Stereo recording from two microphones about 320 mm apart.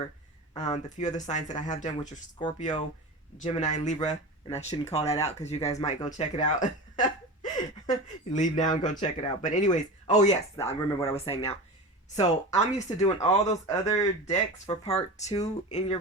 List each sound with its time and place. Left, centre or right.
0.5 s speech: centre